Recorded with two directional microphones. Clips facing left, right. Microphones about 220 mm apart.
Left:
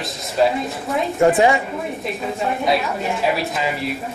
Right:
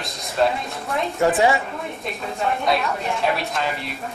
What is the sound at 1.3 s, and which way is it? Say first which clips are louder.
Speech: left 3 dB; 15° left (ahead or behind).